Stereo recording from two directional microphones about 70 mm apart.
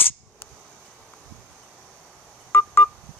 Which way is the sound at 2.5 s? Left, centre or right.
Left.